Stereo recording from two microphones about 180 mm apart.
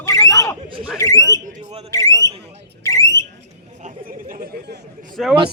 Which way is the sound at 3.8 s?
50° right (ahead or behind).